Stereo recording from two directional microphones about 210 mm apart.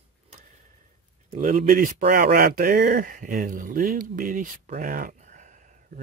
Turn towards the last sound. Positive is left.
turn(degrees=-40)  # may be behind; listen again after turning